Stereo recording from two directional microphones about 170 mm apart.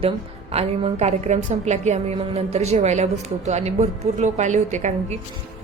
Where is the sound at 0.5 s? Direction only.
35° right (ahead or behind).